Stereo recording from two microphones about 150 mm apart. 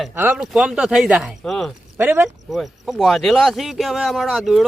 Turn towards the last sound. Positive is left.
turn(degrees=0)  # may be behind; listen again after turning